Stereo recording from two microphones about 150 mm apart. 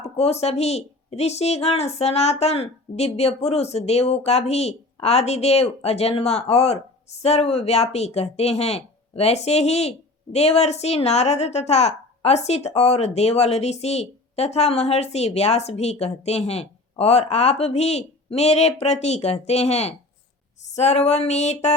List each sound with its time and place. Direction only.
0.0 s a woman's voice: 45° left (ahead or behind)